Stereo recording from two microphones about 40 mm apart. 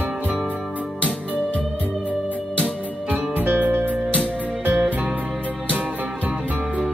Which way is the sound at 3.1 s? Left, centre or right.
Right.